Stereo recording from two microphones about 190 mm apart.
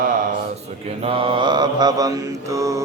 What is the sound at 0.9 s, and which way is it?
Mantra, 30° right (ahead or behind).